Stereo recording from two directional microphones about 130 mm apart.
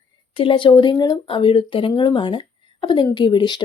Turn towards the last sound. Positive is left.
turn(degrees=35)  # may be behind; listen again after turning